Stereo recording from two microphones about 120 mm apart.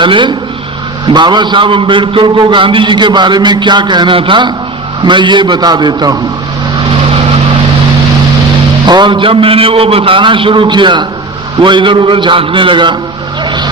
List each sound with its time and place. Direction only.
0.0 s a man's voice: 40° right (ahead or behind)
8.9 s a man's voice: 40° right (ahead or behind)
13.4 s a sound: 40° right (ahead or behind)